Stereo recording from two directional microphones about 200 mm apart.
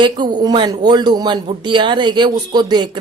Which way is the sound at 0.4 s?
20° right (ahead or behind).